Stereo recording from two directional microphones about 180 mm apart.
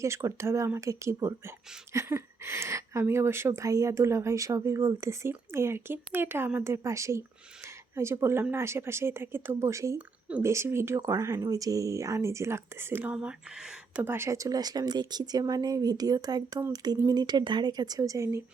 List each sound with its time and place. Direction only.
0.0 s speech: 15° right (ahead or behind)